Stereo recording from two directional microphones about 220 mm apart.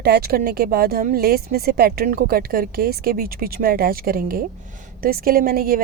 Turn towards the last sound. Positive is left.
turn(degrees=-40)  # may be behind; listen again after turning